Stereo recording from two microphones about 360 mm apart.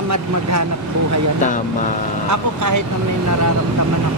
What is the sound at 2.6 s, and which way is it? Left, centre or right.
Speech, right.